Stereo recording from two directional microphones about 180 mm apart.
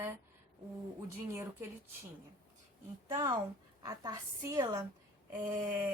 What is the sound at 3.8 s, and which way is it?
Speech, 20° right (ahead or behind).